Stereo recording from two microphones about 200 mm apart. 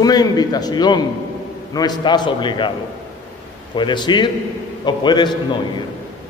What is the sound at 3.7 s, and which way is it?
A man's voice, 25° left (ahead or behind).